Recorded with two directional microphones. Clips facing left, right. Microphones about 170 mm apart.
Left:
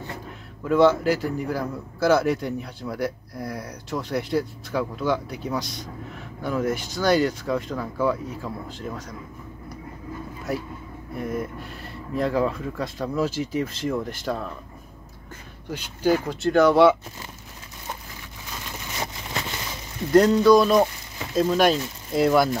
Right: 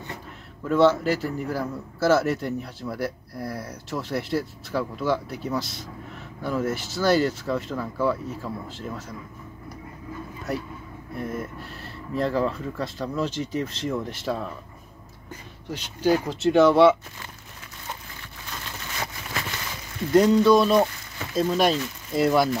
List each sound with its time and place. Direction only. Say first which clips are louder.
0.7 s a man's voice: left 1 dB; centre (ahead or behind)
11.1 s a man's voice: left 2 dB; centre (ahead or behind)
15.7 s a man's voice: even; centre (ahead or behind)
18.7 s a sound: left 2 dB; 15° left (ahead or behind)
20.1 s a man's voice: left 1 dB; 5° right (ahead or behind)